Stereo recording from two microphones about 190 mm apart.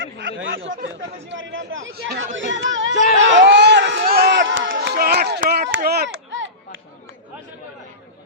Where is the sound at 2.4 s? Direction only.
75° right (ahead or behind); by 6.0 s 55° right (ahead or behind).